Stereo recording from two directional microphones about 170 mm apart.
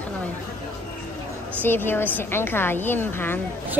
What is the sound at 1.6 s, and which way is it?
A woman's voice, 10° left (ahead or behind).